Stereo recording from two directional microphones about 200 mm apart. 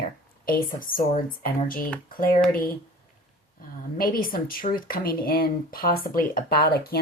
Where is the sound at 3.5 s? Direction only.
45° left (ahead or behind).